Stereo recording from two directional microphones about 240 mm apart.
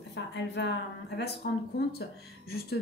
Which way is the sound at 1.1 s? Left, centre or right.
Left.